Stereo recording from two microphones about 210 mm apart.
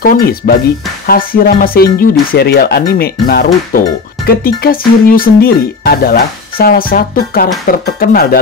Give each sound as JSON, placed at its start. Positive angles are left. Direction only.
{"t": 0.0, "sound": "speech", "side_deg": 45}